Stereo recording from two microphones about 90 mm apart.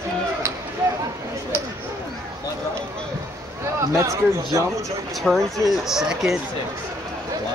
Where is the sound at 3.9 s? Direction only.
35° right (ahead or behind).